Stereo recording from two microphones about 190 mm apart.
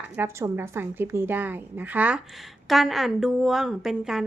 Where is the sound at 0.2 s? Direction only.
15° right (ahead or behind).